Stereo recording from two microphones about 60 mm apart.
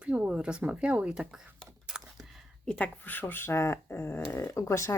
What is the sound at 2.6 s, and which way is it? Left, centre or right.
Speech, left.